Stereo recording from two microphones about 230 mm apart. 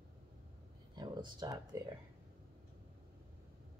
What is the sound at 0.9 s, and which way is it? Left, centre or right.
Speech, centre.